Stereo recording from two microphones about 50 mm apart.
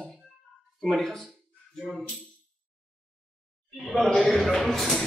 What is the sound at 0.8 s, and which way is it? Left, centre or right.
Speech, centre.